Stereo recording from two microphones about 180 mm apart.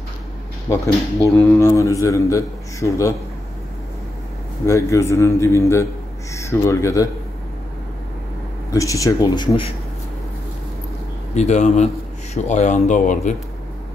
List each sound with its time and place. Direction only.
0.7 s a man's voice: 15° left (ahead or behind)
4.6 s a man's voice: 15° left (ahead or behind)
8.7 s speech: 20° left (ahead or behind)
11.3 s speech: 40° left (ahead or behind)